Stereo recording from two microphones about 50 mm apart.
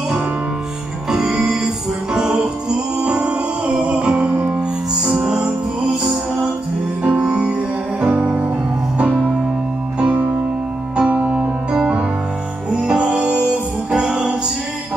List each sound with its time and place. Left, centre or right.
1.1 s music: centre; by 4.6 s right
5.0 s music: centre
7.0 s music: right
11.0 s music: right